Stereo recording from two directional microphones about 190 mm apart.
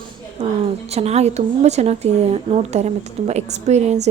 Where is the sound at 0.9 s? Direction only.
35° right (ahead or behind).